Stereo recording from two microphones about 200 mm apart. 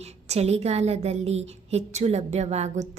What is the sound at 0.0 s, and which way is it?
A woman's voice, 30° right (ahead or behind).